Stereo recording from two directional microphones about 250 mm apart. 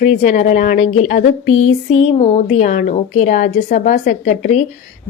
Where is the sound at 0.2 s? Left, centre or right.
Left.